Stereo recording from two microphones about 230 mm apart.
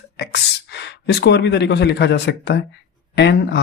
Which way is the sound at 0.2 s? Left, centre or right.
Left.